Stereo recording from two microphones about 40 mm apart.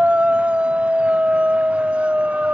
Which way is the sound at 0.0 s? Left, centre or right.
Right.